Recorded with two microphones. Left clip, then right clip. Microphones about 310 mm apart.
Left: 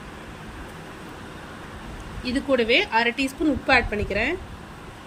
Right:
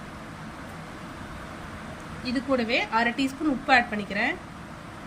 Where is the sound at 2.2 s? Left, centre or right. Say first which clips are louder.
Left 5 dB; centre.